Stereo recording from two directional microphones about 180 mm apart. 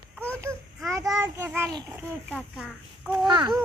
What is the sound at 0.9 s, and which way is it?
A child's voice, 15° right (ahead or behind).